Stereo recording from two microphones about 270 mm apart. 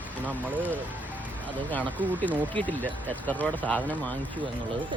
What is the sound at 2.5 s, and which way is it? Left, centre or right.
Speech, centre.